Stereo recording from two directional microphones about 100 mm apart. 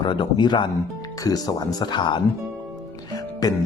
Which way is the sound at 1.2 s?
40° left (ahead or behind).